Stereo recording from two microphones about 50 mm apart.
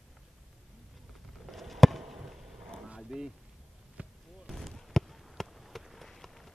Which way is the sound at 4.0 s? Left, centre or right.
Right.